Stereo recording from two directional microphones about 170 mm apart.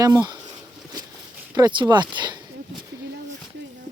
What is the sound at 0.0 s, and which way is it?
Speech, 20° right (ahead or behind).